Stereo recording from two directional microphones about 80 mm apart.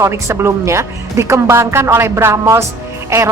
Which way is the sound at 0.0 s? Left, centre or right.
Right.